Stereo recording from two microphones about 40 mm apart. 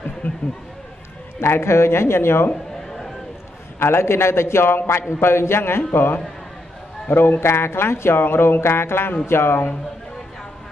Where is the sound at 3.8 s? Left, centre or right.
Left.